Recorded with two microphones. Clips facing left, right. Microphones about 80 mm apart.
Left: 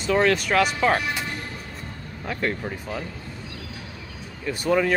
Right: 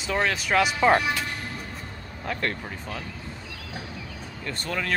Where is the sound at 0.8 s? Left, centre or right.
Centre.